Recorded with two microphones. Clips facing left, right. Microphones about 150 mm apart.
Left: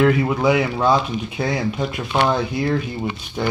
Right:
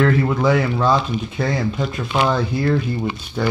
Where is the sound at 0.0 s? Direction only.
10° left (ahead or behind).